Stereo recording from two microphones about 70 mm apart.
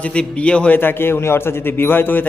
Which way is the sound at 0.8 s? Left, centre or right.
Left.